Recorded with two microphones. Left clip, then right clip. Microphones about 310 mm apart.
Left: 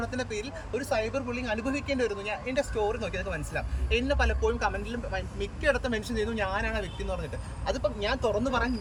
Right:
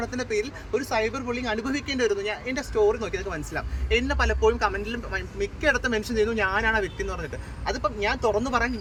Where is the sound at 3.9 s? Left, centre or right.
Centre.